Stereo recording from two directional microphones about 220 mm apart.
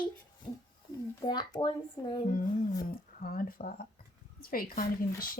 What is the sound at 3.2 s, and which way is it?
Speech, 40° left (ahead or behind).